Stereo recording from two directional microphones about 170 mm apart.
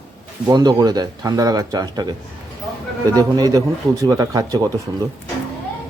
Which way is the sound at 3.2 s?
20° right (ahead or behind).